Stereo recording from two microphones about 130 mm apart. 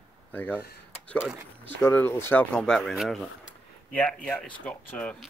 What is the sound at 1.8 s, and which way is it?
Speech, 15° left (ahead or behind).